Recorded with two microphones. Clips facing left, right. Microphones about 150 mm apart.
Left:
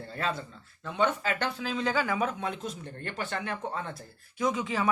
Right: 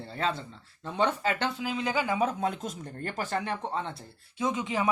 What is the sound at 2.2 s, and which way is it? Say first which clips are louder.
Speech: right 3 dB; 35° right (ahead or behind).